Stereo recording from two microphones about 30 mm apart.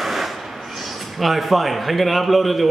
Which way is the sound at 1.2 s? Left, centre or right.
Centre.